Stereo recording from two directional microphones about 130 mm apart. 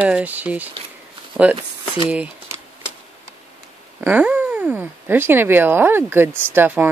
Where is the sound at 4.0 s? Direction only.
15° right (ahead or behind).